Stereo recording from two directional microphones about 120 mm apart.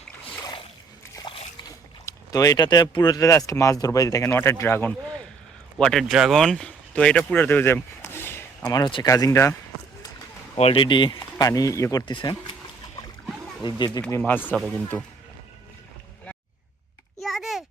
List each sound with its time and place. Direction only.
2.0 s speech: 30° left (ahead or behind)
5.8 s speech: 5° left (ahead or behind); by 8.4 s 20° left (ahead or behind)
8.7 s speech: 40° left (ahead or behind)
9.0 s speech: 25° left (ahead or behind)
10.6 s speech: 50° left (ahead or behind); by 12.1 s 30° left (ahead or behind)
12.1 s speech: 45° left (ahead or behind)
13.6 s speech: 40° left (ahead or behind)
14.2 s speech: 15° left (ahead or behind)
14.4 s speech: 5° right (ahead or behind)
17.2 s a sound: centre (ahead or behind)